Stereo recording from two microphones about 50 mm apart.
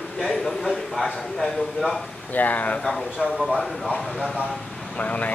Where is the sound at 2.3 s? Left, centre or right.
Left.